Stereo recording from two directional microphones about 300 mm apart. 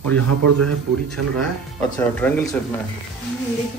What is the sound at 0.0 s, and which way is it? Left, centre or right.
Speech, right.